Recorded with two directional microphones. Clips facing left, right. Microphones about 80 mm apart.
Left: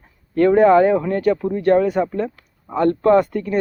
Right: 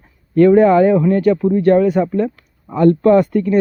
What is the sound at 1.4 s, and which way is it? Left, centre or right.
Speech, centre.